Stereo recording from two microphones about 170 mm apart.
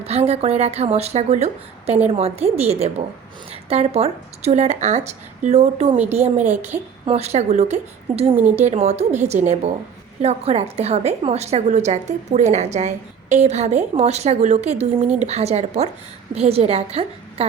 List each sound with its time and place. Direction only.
0.0 s a woman's voice: 35° right (ahead or behind)